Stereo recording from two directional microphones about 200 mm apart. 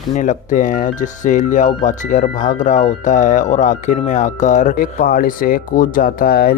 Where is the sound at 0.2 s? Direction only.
40° left (ahead or behind).